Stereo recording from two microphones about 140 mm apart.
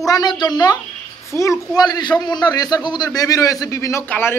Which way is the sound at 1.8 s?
30° left (ahead or behind).